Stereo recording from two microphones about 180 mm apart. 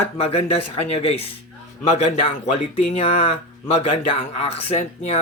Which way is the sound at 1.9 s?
35° left (ahead or behind).